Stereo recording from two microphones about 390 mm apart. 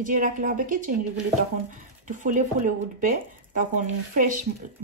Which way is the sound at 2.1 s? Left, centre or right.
Centre.